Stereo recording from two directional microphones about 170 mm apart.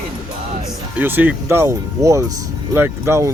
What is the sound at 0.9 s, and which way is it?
A man's voice, 10° right (ahead or behind).